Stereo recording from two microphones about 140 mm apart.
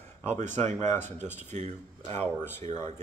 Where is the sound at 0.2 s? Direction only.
55° right (ahead or behind).